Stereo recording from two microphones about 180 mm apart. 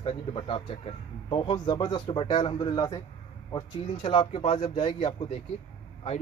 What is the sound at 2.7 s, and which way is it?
Speech, 20° left (ahead or behind).